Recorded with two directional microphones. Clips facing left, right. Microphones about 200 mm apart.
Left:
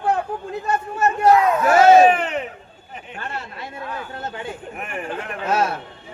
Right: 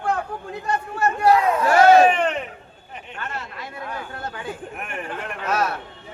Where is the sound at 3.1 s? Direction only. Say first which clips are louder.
Left 1 dB; 30° left (ahead or behind).